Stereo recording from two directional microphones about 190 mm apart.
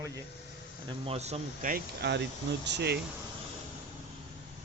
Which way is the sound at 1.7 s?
60° right (ahead or behind).